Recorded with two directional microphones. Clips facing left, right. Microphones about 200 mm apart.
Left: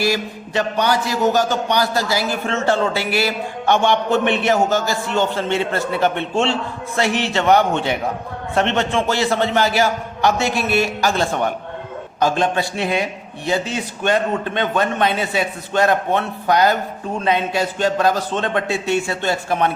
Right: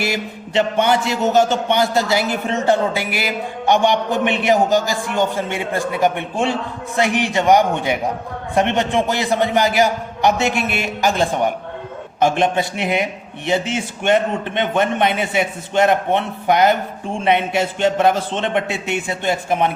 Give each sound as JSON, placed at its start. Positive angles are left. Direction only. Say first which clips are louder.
{"t": 0.0, "sound": "a man's voice", "louder": "left 2 dB", "side_deg": -20}